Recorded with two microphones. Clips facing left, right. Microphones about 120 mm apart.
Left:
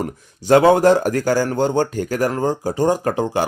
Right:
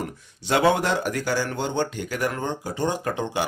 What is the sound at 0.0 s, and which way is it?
Speech, 45° left (ahead or behind).